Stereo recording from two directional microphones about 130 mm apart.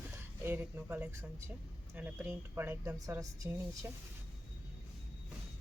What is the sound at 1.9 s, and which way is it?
Speech, 15° right (ahead or behind).